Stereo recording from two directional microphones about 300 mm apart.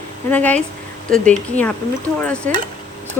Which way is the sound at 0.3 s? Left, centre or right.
Centre.